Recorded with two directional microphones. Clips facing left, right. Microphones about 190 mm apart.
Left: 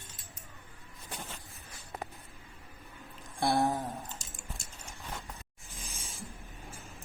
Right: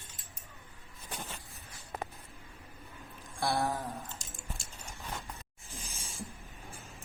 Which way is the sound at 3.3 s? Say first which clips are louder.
Left 3 dB; 20° left (ahead or behind).